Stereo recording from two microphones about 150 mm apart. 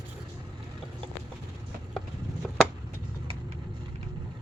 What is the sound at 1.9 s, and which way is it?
Chop, centre (ahead or behind).